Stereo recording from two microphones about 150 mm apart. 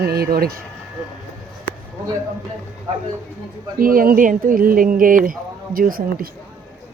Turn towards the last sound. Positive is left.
turn(degrees=-75)  # may be behind; listen again after turning